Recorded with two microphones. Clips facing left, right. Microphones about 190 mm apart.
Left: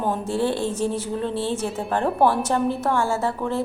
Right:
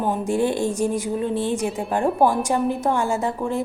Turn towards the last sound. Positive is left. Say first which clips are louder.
# right 1 dB
turn(degrees=-15)  # may be behind; listen again after turning